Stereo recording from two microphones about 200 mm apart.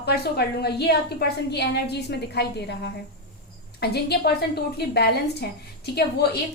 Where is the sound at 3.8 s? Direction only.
55° left (ahead or behind).